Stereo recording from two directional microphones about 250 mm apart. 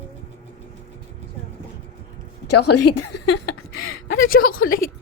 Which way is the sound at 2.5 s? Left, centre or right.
Left.